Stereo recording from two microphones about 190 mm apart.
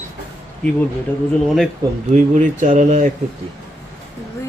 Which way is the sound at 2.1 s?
40° right (ahead or behind).